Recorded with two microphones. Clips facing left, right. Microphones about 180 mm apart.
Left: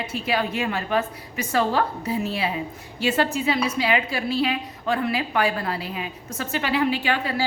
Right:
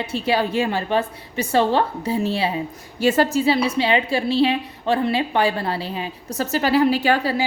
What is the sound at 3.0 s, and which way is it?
A woman's voice, 40° right (ahead or behind).